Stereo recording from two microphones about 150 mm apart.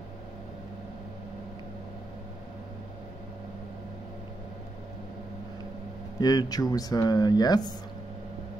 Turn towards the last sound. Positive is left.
turn(degrees=25)  # may be behind; listen again after turning